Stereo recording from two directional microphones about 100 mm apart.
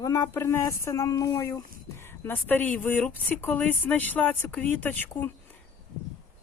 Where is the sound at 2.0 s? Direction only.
20° left (ahead or behind).